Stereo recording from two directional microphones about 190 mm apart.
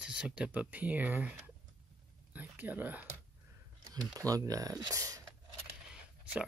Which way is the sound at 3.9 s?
20° right (ahead or behind).